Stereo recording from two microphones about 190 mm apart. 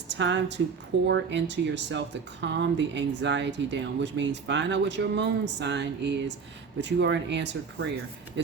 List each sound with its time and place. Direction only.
0.1 s a woman's voice: 70° right (ahead or behind)